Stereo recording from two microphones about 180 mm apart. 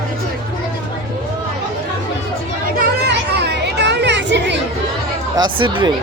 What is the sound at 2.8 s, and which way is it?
Children playing, 65° right (ahead or behind).